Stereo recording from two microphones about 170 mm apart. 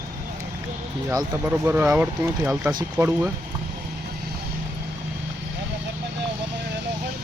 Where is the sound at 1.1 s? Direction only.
15° right (ahead or behind).